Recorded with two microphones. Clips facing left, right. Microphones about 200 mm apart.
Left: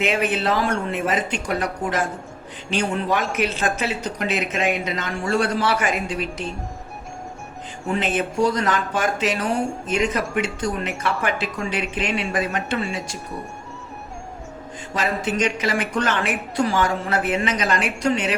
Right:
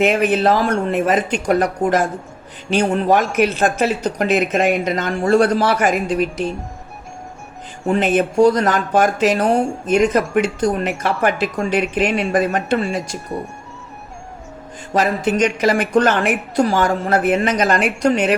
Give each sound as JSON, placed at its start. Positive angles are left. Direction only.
{"t": 0.0, "sound": "speech", "side_deg": -45}
{"t": 7.9, "sound": "speech", "side_deg": -50}
{"t": 14.9, "sound": "speech", "side_deg": -50}